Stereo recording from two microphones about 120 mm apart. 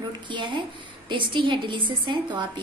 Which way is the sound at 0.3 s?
40° right (ahead or behind).